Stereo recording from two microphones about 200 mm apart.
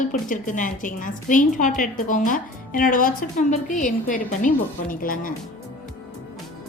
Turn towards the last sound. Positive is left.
turn(degrees=45)  # may be behind; listen again after turning